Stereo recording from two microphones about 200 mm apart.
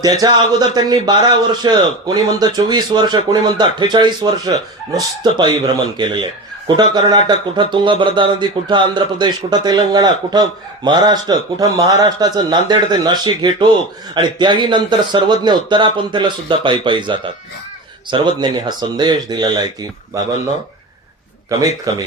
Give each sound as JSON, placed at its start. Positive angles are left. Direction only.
{"t": 0.2, "sound": "speech", "side_deg": -20}
{"t": 21.9, "sound": "speech", "side_deg": -15}